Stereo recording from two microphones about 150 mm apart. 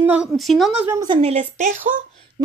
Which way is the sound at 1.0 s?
35° right (ahead or behind).